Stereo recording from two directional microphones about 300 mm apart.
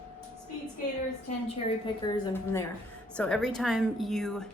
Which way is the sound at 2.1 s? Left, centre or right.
Centre.